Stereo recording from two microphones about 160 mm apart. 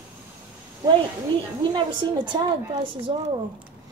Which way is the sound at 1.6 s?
30° right (ahead or behind).